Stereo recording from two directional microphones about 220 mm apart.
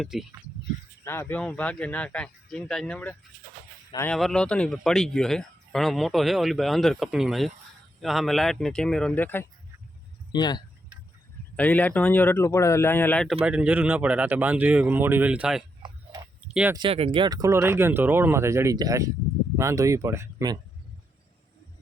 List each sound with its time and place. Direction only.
0.0 s speech: centre (ahead or behind)
1.0 s speech: 10° left (ahead or behind)
10.3 s speech: 20° left (ahead or behind)
11.5 s speech: 5° left (ahead or behind)
13.4 s speech: 5° right (ahead or behind)
15.8 s tick-tock: 20° right (ahead or behind)
16.5 s speech: 5° right (ahead or behind)
16.7 s speech: 25° right (ahead or behind)